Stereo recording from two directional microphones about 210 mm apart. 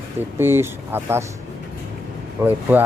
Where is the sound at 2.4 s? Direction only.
15° right (ahead or behind).